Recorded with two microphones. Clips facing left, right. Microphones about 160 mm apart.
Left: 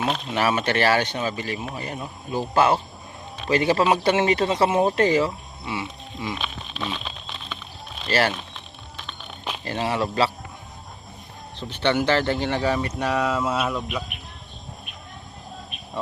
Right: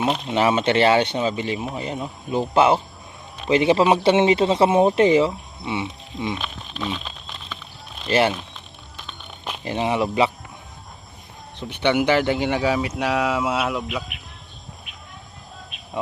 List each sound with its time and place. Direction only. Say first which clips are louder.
0.0 s speech: right 3 dB; 20° right (ahead or behind)
6.7 s speech: right 3 dB; 5° right (ahead or behind)
8.0 s speech: right 3 dB; 15° right (ahead or behind)
9.6 s speech: right 3 dB; 15° right (ahead or behind)
11.7 s speech: right 2 dB; 15° right (ahead or behind)